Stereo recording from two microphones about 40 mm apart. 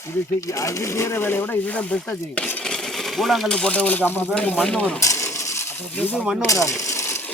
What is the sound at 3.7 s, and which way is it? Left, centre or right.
Speech, left.